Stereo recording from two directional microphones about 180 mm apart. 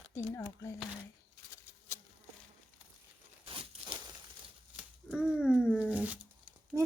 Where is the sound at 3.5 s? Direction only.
30° right (ahead or behind).